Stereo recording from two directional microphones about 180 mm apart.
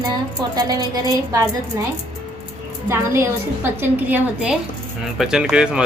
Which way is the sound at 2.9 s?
15° right (ahead or behind).